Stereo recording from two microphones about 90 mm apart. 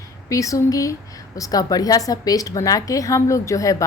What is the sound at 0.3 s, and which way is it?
A woman's voice, 40° left (ahead or behind).